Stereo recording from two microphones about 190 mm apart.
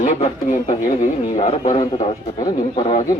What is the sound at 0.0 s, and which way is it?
Speech, 40° left (ahead or behind).